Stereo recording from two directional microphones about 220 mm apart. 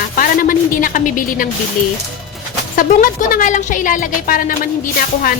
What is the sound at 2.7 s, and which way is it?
A woman's voice, 40° left (ahead or behind).